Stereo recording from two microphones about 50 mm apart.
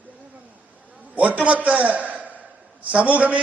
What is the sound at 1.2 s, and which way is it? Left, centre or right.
A man's voice, right.